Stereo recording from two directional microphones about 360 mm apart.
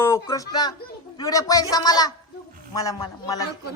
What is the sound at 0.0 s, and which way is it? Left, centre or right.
Speech, centre.